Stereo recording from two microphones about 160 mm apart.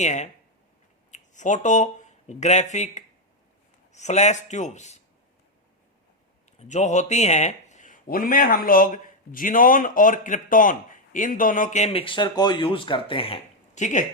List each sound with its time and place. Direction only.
0.0 s speech: 45° left (ahead or behind)
6.6 s speech: 45° left (ahead or behind)